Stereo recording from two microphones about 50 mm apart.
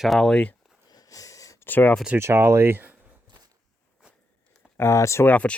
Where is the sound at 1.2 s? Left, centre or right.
Left.